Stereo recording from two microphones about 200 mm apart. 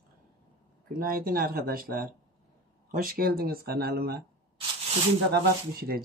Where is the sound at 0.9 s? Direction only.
45° right (ahead or behind).